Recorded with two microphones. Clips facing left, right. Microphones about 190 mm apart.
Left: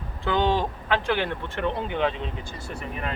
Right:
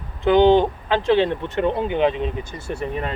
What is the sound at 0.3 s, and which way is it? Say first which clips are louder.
Speech: right 10 dB; 25° right (ahead or behind).